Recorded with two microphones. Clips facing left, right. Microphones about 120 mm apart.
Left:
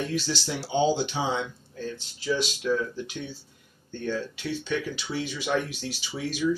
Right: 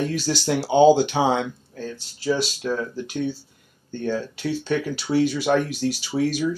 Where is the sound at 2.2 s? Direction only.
40° right (ahead or behind).